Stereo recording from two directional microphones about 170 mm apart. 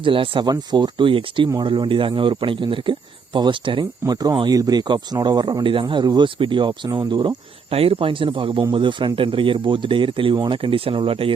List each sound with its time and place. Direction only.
0.0 s speech: 30° right (ahead or behind)